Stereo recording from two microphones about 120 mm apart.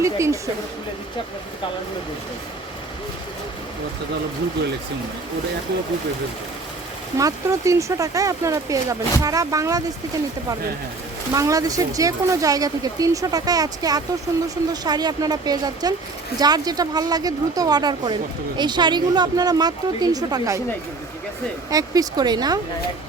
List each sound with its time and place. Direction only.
0.0 s speech: 25° right (ahead or behind)
7.2 s speech: 25° right (ahead or behind)
11.3 s speech: 30° right (ahead or behind)
21.7 s speech: 30° right (ahead or behind)